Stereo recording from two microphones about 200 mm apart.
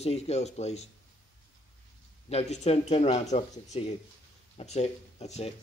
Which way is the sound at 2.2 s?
30° left (ahead or behind).